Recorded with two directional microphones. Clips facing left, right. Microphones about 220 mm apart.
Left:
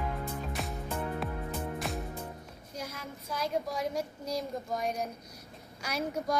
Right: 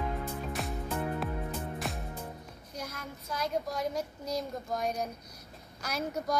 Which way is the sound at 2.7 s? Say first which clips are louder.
Even; 10° left (ahead or behind).